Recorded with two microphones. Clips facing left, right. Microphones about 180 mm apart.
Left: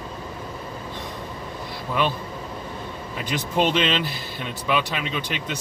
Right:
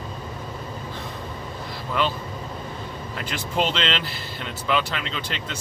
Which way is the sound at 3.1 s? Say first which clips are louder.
Left 2 dB; 15° left (ahead or behind).